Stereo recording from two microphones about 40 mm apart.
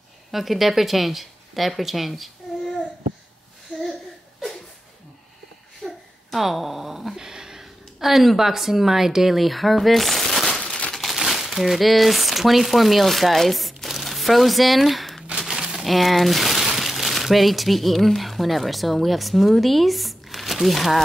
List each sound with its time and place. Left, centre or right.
0.3 s speech: centre
5.9 s a sound: centre
7.2 s speech: centre
13.8 s crumpling: centre
15.3 s speech: centre